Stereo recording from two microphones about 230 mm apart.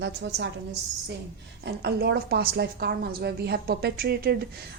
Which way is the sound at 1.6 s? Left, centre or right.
Right.